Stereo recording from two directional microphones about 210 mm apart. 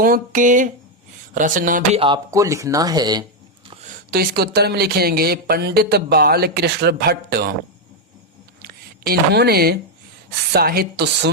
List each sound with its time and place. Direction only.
0.0 s speech: 40° right (ahead or behind)
2.0 s speech: 20° right (ahead or behind)
4.1 s speech: 45° right (ahead or behind)
8.6 s speech: 50° right (ahead or behind)